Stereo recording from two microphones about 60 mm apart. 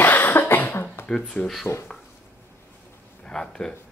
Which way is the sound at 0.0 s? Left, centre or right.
Left.